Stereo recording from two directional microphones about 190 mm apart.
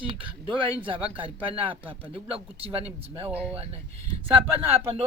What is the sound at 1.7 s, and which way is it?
Speech, 10° right (ahead or behind).